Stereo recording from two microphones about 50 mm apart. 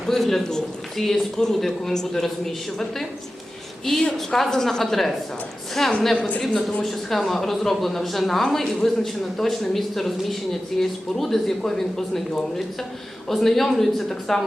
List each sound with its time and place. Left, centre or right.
0.0 s a man's voice: centre
3.9 s a woman's voice: centre
6.8 s a man's voice: centre
13.2 s a man's voice: centre